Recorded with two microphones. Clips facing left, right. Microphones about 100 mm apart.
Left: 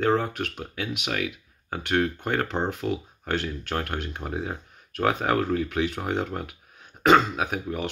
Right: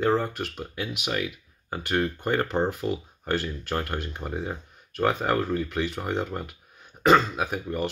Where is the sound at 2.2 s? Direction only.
5° right (ahead or behind).